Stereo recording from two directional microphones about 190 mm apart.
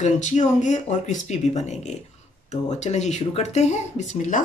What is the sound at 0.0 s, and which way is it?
Speech, 40° left (ahead or behind).